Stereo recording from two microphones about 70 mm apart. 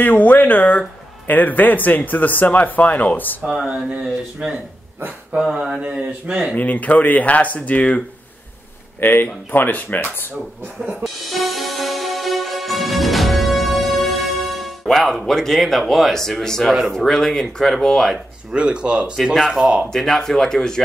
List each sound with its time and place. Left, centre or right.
0.0 s speech: left
3.4 s speech: centre
6.5 s speech: left
9.0 s speech: left
11.2 s music: centre
18.5 s speech: centre
19.9 s speech: centre